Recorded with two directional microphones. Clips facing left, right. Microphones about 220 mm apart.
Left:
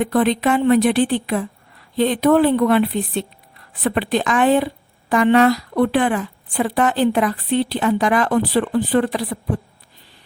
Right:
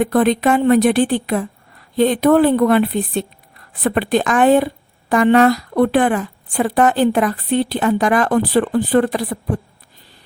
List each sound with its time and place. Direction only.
0.0 s speech: 45° right (ahead or behind)